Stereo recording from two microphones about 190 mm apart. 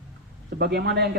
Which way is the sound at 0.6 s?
60° right (ahead or behind).